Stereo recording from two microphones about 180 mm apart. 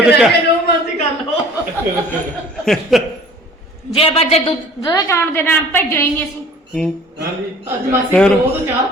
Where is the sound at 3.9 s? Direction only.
30° left (ahead or behind).